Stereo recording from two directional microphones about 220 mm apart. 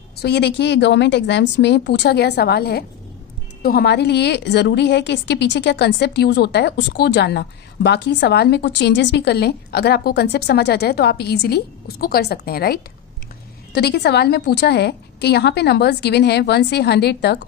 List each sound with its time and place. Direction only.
0.2 s a woman's voice: 50° left (ahead or behind)